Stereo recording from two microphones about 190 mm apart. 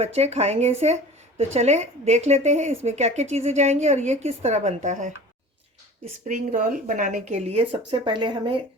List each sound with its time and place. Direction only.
0.0 s a woman's voice: 35° right (ahead or behind)
6.2 s a woman's voice: 40° right (ahead or behind)